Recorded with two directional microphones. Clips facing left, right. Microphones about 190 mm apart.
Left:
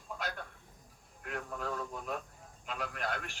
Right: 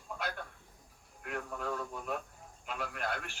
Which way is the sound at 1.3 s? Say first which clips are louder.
Right 1 dB; centre (ahead or behind).